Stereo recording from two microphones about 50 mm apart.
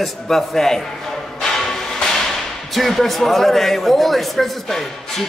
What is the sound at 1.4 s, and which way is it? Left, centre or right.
Whip, centre.